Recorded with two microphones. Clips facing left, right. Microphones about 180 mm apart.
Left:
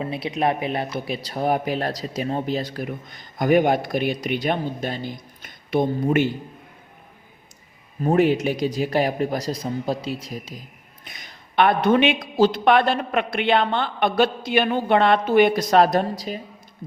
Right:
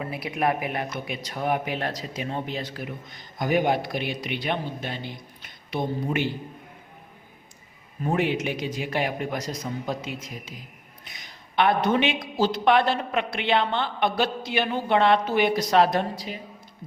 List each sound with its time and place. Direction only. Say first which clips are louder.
0.0 s speech: left 3 dB; 25° left (ahead or behind); by 6.3 s 50° left (ahead or behind)
8.0 s speech: left 6 dB; 40° left (ahead or behind)
11.0 s a man's voice: left 4 dB; 50° left (ahead or behind)